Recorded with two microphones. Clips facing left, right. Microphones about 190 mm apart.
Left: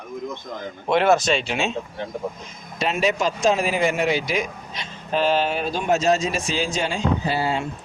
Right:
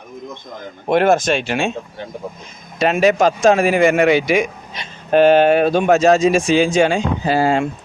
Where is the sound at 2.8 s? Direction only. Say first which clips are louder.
Right 8 dB; 55° right (ahead or behind); by 7.4 s 75° right (ahead or behind).